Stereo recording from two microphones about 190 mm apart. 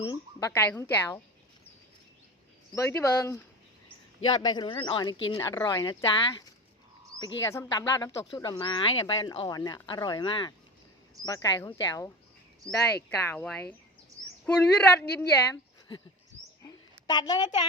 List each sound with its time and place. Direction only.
0.0 s speech: 20° left (ahead or behind)
2.7 s speech: 15° left (ahead or behind)
7.4 s speech: 15° left (ahead or behind)
13.1 s speech: 10° left (ahead or behind)
16.6 s a sound: 20° left (ahead or behind)